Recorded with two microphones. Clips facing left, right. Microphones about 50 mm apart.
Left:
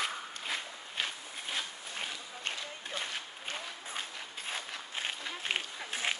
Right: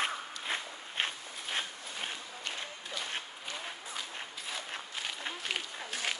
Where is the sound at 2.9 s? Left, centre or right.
Left.